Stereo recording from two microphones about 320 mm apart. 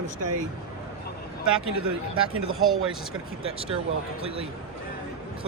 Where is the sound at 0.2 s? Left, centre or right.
Right.